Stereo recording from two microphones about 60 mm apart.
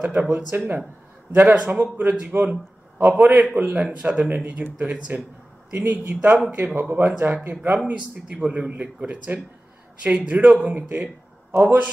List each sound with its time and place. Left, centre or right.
0.0 s speech: right
1.3 s speech: right
3.8 s speech: right
7.8 s speech: centre
10.7 s speech: right
11.6 s speech: right